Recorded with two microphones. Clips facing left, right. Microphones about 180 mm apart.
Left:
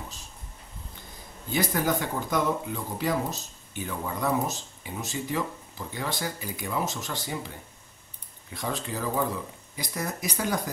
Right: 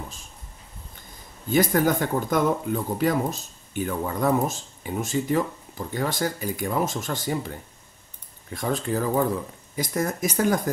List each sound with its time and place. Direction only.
1.5 s speech: 50° right (ahead or behind)
8.5 s speech: 50° right (ahead or behind)